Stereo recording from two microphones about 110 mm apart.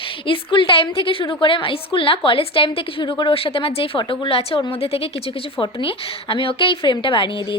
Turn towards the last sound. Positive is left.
turn(degrees=55)  # may be behind; listen again after turning